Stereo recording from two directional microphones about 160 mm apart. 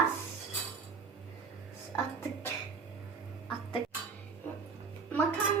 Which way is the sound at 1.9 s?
15° left (ahead or behind).